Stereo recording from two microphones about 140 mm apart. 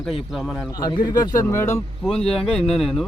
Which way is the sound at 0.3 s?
5° right (ahead or behind).